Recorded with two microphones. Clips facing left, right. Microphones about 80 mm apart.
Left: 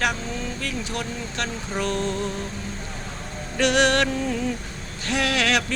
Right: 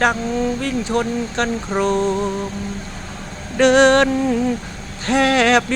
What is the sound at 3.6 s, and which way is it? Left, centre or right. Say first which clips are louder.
Speech: right 8 dB; right.